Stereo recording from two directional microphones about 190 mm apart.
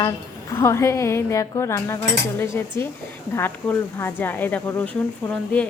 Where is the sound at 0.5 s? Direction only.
15° left (ahead or behind).